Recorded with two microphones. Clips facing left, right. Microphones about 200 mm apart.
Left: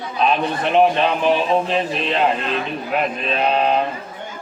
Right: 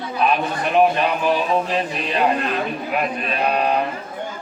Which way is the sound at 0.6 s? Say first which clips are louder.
Left 1 dB; 20° left (ahead or behind).